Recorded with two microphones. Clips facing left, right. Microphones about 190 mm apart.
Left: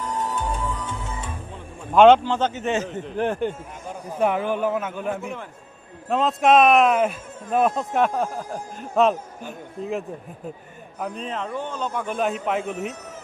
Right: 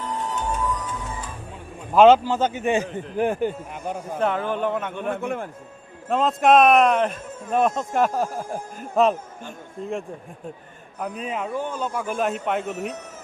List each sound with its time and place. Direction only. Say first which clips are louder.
0.1 s music: even; 40° left (ahead or behind)
0.7 s music: right 1 dB; 25° left (ahead or behind)
1.9 s a man's voice: even; 5° right (ahead or behind)
4.2 s speech: left 2 dB; 10° left (ahead or behind)
5.2 s a man's voice: right 5 dB; 55° right (ahead or behind)
6.1 s speech: even; centre (ahead or behind)
11.0 s speech: right 1 dB; 5° right (ahead or behind)